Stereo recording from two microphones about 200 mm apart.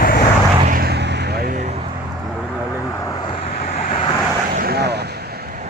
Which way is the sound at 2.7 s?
15° left (ahead or behind).